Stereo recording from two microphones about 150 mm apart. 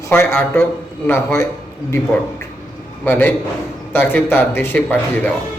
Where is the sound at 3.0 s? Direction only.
10° left (ahead or behind).